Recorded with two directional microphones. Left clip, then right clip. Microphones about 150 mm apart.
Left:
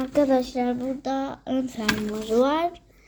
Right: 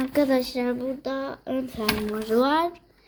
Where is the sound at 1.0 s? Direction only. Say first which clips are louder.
Left 2 dB; 10° right (ahead or behind).